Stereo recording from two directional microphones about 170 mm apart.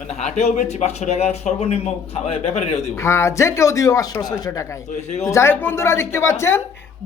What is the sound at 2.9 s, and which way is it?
Speech, 15° left (ahead or behind).